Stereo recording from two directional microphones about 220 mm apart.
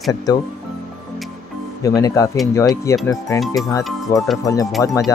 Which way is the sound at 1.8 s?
15° left (ahead or behind).